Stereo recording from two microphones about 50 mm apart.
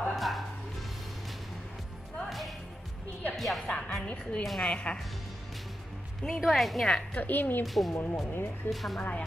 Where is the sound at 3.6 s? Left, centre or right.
Left.